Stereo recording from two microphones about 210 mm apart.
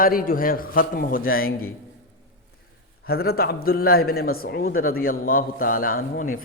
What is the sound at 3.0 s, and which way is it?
Speech, 45° left (ahead or behind).